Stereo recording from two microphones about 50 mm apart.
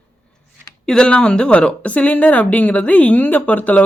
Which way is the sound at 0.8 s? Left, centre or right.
Centre.